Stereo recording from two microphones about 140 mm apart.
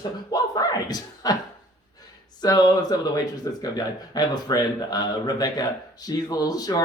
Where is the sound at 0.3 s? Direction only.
25° left (ahead or behind).